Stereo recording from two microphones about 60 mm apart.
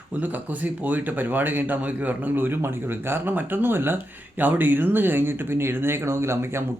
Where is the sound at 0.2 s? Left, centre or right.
Right.